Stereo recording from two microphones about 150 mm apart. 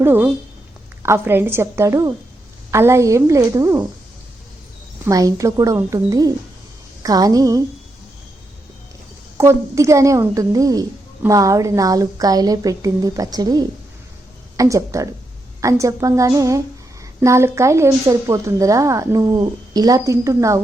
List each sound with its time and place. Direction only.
0.0 s a woman's voice: 15° right (ahead or behind)
5.0 s a woman's voice: 20° right (ahead or behind)
9.4 s a woman's voice: 20° right (ahead or behind)